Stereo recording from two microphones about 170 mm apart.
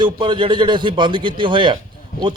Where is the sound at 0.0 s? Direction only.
30° right (ahead or behind).